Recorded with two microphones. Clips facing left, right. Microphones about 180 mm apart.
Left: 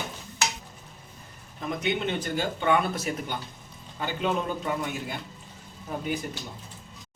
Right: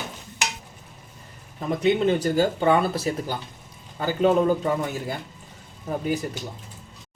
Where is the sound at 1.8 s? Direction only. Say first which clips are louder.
Right 9 dB; 35° right (ahead or behind).